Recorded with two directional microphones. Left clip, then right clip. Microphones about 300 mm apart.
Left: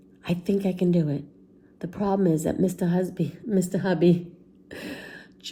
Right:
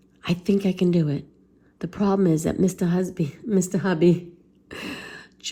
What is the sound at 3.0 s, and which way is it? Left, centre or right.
Speech, centre.